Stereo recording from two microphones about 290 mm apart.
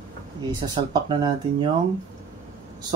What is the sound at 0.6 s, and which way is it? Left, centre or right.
Speech, centre.